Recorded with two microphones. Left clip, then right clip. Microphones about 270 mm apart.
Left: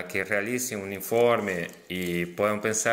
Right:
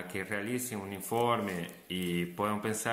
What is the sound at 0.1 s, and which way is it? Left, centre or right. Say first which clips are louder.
Speech: left 9 dB; centre.